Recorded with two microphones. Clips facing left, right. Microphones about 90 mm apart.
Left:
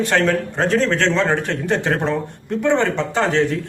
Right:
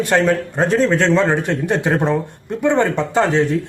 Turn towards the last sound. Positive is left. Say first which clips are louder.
# right 2 dB
turn(degrees=-15)  # may be behind; listen again after turning